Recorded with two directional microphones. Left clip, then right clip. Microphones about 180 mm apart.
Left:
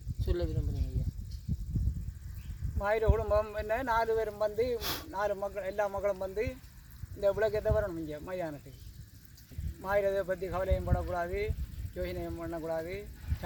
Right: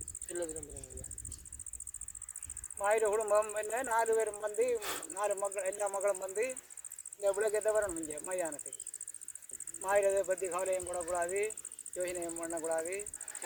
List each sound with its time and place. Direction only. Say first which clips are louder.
2.7 s speech: even; centre (ahead or behind)
4.8 s speech: left 3 dB; 50° left (ahead or behind)
5.1 s speech: left 1 dB; centre (ahead or behind)
9.8 s speech: even; centre (ahead or behind)